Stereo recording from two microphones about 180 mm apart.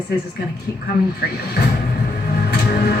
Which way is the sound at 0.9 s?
60° left (ahead or behind).